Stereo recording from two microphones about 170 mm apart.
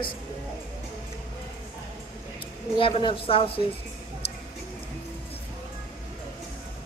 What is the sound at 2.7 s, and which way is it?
Speech, 30° left (ahead or behind).